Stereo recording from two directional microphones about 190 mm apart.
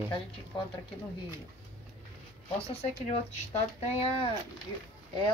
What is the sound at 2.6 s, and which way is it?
Speech, 30° left (ahead or behind).